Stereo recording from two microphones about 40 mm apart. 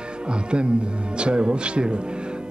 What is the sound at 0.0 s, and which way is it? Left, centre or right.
Speech, right.